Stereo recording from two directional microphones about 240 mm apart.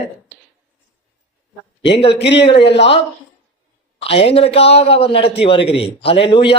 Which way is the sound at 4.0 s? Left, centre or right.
Left.